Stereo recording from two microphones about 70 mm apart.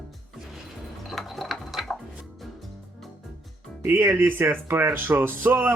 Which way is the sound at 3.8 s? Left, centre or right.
Right.